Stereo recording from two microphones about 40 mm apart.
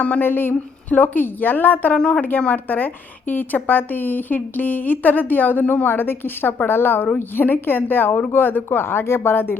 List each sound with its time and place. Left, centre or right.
0.0 s speech: left
0.3 s a woman's voice: left
0.9 s a woman's voice: left
2.0 s a woman's voice: centre
2.6 s a woman's voice: left